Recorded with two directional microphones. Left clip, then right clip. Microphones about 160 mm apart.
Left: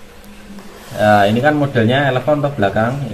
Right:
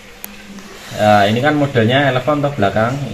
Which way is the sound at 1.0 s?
25° right (ahead or behind).